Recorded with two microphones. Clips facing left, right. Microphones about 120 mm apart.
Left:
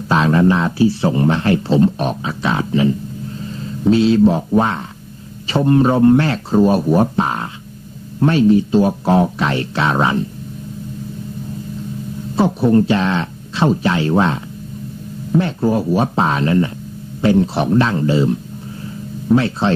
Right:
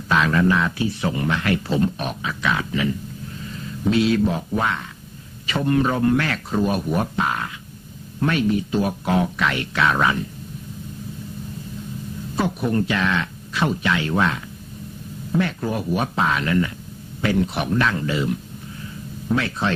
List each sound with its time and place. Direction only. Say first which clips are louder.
0.1 s speech: left 5 dB; 30° left (ahead or behind)
12.4 s speech: left 8 dB; 30° left (ahead or behind)